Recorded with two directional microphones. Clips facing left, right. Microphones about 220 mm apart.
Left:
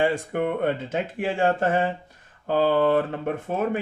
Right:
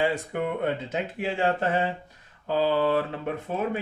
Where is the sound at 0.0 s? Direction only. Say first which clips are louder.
Left 3 dB; 50° left (ahead or behind).